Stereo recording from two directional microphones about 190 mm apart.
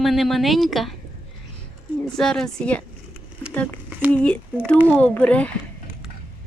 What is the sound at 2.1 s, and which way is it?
Speech, 5° left (ahead or behind).